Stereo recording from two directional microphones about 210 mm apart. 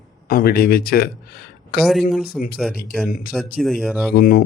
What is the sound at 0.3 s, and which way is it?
Speech, 45° left (ahead or behind).